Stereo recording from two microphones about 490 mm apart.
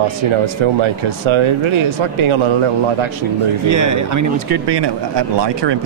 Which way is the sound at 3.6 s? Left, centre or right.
Right.